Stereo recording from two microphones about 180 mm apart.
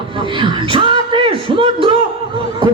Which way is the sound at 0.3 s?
25° right (ahead or behind).